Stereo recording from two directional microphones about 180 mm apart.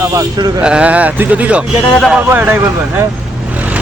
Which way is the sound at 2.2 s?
10° right (ahead or behind).